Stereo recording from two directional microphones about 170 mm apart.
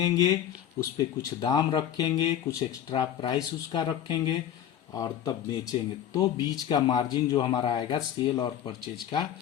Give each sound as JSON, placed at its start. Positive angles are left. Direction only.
{"t": 0.0, "sound": "speech", "side_deg": 20}